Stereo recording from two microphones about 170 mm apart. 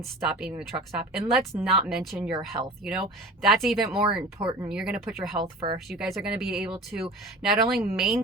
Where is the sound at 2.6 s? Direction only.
30° right (ahead or behind).